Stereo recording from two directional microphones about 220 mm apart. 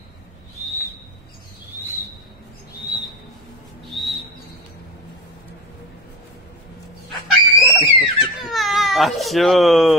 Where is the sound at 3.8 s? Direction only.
Centre (ahead or behind).